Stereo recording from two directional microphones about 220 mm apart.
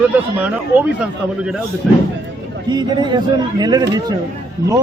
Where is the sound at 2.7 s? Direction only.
20° right (ahead or behind).